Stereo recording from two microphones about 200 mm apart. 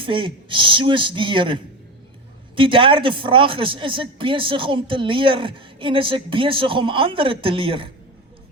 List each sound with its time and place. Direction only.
0.0 s speech: 25° right (ahead or behind)